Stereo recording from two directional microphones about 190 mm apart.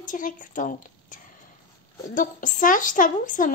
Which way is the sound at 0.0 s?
45° left (ahead or behind).